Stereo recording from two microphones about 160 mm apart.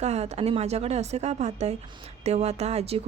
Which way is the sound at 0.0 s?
45° right (ahead or behind).